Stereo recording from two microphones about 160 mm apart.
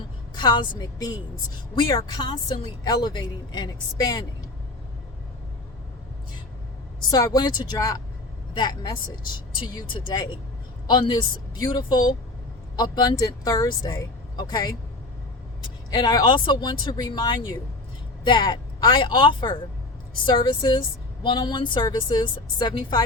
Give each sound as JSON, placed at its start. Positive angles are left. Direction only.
{"t": 0.3, "sound": "speech", "side_deg": 30}
{"t": 7.1, "sound": "speech", "side_deg": 25}
{"t": 15.9, "sound": "speech", "side_deg": 25}